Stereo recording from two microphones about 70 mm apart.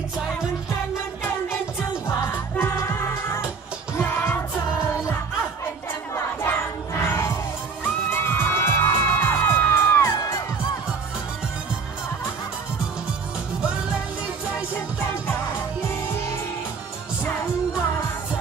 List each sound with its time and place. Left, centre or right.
2.0 s music: left
6.1 s crowd: left
7.8 s music: left